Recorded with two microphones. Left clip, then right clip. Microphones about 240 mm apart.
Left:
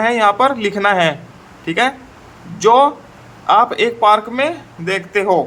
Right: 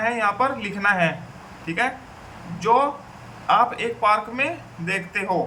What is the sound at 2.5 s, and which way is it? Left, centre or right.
Speech, left.